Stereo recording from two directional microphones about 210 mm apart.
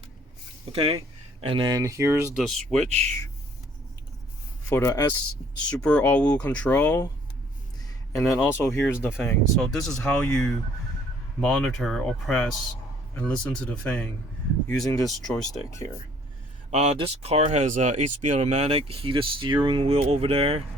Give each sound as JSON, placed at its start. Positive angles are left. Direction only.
{"t": 0.7, "sound": "speech", "side_deg": -25}
{"t": 2.3, "sound": "speech", "side_deg": 0}
{"t": 4.7, "sound": "speech", "side_deg": 15}
{"t": 8.2, "sound": "speech", "side_deg": 0}
{"t": 8.5, "sound": "speech", "side_deg": 15}
{"t": 15.7, "sound": "speech", "side_deg": 15}
{"t": 16.7, "sound": "speech", "side_deg": -30}